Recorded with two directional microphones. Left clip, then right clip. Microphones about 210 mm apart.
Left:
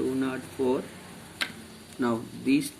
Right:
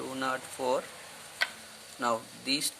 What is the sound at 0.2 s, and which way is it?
Speech, 35° right (ahead or behind).